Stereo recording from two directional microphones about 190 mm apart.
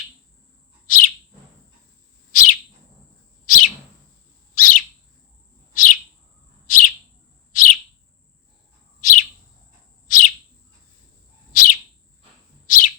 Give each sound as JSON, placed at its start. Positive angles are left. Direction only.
{"t": 0.9, "sound": "bird", "side_deg": 45}
{"t": 2.3, "sound": "bird", "side_deg": 45}
{"t": 7.5, "sound": "chirp", "side_deg": 45}
{"t": 9.0, "sound": "bird", "side_deg": 45}
{"t": 10.1, "sound": "chirp", "side_deg": 45}
{"t": 11.5, "sound": "bird", "side_deg": 45}